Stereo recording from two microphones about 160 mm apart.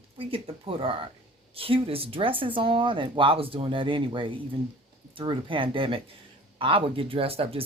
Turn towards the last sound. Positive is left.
turn(degrees=-35)  # may be behind; listen again after turning